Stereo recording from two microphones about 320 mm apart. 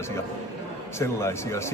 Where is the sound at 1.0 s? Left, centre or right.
Centre.